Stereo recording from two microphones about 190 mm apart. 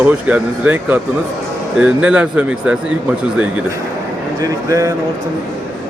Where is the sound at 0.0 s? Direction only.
5° right (ahead or behind).